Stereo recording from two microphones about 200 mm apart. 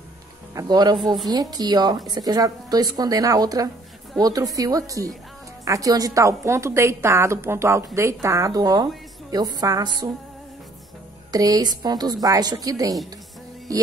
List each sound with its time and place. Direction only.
0.6 s a woman's voice: 20° right (ahead or behind)
11.3 s speech: 20° right (ahead or behind)